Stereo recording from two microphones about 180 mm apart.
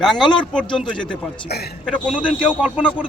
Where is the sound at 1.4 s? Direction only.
60° left (ahead or behind).